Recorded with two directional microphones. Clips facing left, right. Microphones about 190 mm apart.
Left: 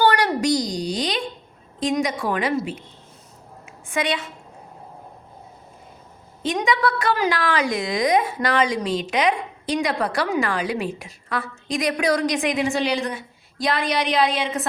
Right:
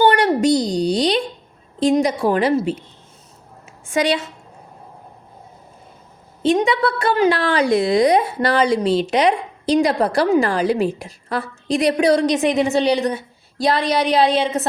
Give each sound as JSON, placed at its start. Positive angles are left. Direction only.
{"t": 0.0, "sound": "a woman's voice", "side_deg": -25}
{"t": 3.8, "sound": "a woman's voice", "side_deg": -30}
{"t": 6.4, "sound": "a woman's voice", "side_deg": -30}